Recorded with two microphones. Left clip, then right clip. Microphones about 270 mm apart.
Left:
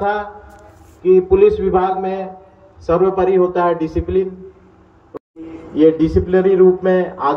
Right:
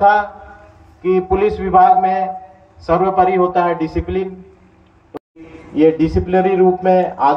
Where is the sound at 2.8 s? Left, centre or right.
Centre.